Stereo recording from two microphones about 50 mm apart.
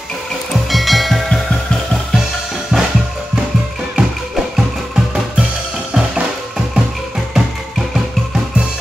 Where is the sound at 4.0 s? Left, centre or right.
Right.